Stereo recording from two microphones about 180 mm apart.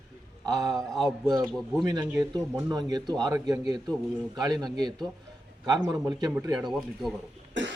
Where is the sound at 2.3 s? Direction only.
20° right (ahead or behind).